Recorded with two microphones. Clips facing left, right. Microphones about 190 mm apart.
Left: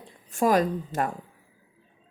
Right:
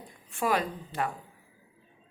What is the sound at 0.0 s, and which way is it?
A woman's voice, 40° left (ahead or behind).